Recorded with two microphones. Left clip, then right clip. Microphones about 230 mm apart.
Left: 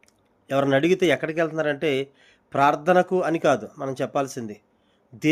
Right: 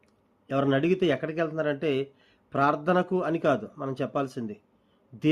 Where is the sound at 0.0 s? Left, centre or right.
Centre.